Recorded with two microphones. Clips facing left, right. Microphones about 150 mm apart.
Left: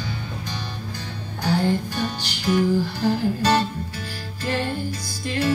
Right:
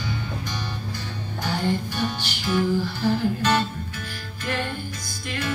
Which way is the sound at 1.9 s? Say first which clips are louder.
Even; 40° left (ahead or behind).